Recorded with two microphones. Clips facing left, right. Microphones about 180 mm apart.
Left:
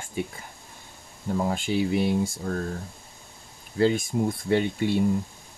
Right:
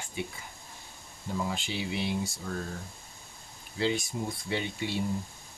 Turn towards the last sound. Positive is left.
turn(degrees=50)  # may be behind; listen again after turning